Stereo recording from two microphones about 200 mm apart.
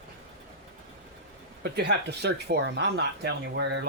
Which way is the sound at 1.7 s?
55° right (ahead or behind).